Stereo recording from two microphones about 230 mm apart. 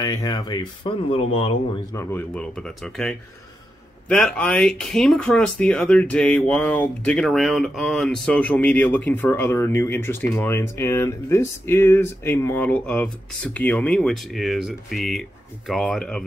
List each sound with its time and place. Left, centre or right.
0.0 s speech: centre
2.0 s speech: centre